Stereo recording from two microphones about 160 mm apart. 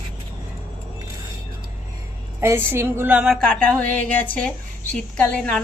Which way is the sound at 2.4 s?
15° right (ahead or behind).